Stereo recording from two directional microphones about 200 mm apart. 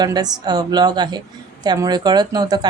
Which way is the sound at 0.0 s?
20° right (ahead or behind).